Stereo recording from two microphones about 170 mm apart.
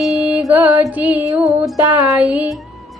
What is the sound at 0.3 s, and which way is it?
Music, 10° right (ahead or behind).